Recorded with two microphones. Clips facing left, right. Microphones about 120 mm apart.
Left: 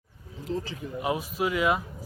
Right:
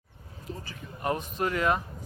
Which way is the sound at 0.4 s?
90° left.